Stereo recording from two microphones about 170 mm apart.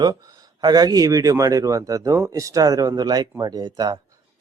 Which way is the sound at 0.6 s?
25° right (ahead or behind).